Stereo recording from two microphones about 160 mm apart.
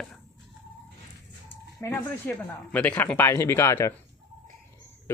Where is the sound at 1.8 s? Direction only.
15° left (ahead or behind).